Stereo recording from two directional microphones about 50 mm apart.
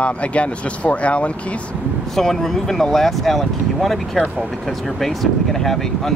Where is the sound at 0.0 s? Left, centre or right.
Left.